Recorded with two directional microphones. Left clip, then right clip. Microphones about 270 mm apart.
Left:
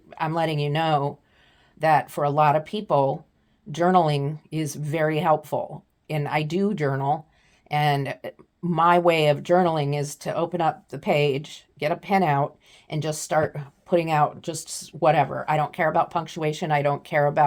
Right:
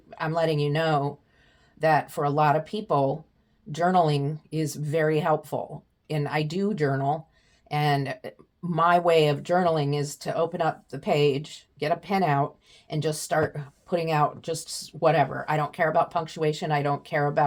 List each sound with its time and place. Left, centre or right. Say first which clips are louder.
0.1 s speech: even; left